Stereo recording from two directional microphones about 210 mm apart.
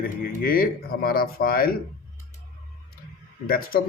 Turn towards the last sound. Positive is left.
turn(degrees=45)  # may be behind; listen again after turning